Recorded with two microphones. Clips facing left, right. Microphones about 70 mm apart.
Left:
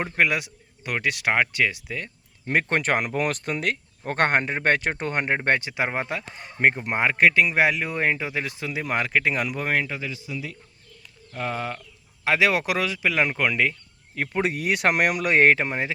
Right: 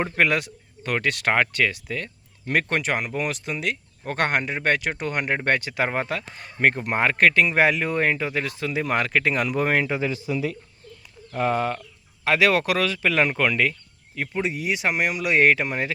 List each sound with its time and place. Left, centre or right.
0.0 s speech: centre
2.6 s speech: left
5.4 s speech: left
9.6 s speech: centre
10.2 s speech: right
11.3 s speech: centre
12.2 s speech: centre
14.4 s speech: left